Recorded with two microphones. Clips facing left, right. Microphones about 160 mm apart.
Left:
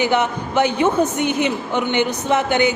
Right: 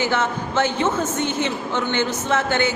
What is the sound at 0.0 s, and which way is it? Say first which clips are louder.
A woman's voice: left 3 dB; 15° left (ahead or behind).